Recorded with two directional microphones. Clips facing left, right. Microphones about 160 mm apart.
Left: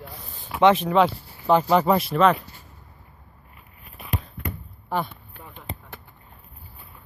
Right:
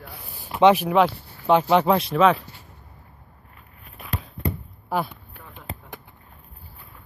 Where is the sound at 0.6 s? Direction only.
10° right (ahead or behind).